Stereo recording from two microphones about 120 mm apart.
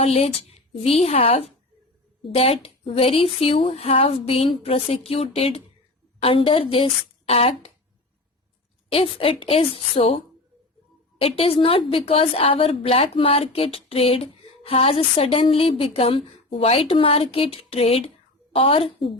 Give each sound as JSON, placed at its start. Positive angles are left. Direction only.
{"t": 0.0, "sound": "a woman's voice", "side_deg": 60}
{"t": 8.9, "sound": "a woman's voice", "side_deg": 50}
{"t": 11.2, "sound": "a woman's voice", "side_deg": 50}